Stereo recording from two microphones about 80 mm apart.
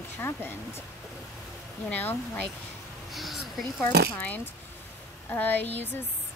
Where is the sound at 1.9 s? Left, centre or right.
Left.